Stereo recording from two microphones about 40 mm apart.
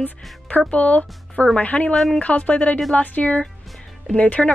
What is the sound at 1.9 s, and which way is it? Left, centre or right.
Speech, centre.